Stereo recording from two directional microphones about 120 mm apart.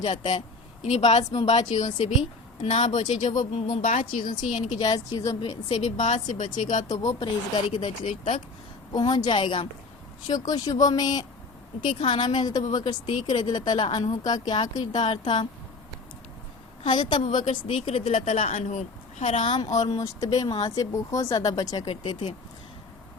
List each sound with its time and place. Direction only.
0.0 s speech: 50° left (ahead or behind)
0.8 s a woman's voice: 70° left (ahead or behind); by 4.7 s 90° left
4.8 s speech: 35° left (ahead or behind)
5.6 s speech: 55° left (ahead or behind)
6.0 s speech: 80° left
7.2 s speech: 40° left (ahead or behind); by 8.4 s 60° left (ahead or behind)
8.9 s speech: 35° left (ahead or behind)
11.9 s a woman's voice: 55° left (ahead or behind)
12.2 s speech: 40° left (ahead or behind)
16.8 s speech: 40° left (ahead or behind)
17.2 s speech: 85° left
19.3 s speech: 45° left (ahead or behind)
19.8 s speech: 30° left (ahead or behind)
21.8 s speech: 45° left (ahead or behind)